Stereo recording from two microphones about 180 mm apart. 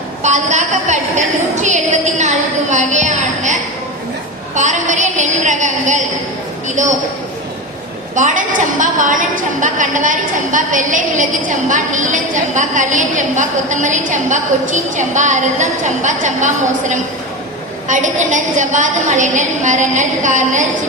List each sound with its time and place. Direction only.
0.2 s a sound: 40° right (ahead or behind)
4.5 s a woman's voice: 40° right (ahead or behind)
8.1 s a woman's voice: 45° right (ahead or behind)
17.8 s a woman's voice: 45° right (ahead or behind)